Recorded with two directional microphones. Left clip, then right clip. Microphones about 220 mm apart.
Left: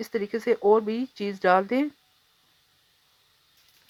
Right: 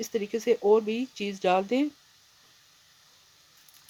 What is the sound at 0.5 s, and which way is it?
Speech, 20° left (ahead or behind).